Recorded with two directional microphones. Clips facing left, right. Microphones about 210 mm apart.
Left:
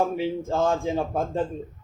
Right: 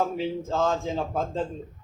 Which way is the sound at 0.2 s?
15° left (ahead or behind).